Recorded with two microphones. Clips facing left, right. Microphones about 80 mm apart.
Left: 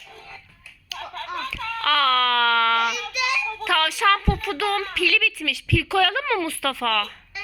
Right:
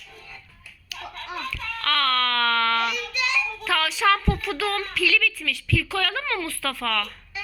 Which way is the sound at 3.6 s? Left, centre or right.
Left.